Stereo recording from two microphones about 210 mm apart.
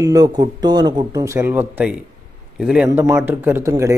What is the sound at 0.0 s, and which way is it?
Speech, 15° right (ahead or behind).